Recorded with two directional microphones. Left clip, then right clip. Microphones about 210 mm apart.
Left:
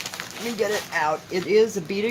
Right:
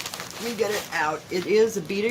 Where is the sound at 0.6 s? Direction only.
15° left (ahead or behind).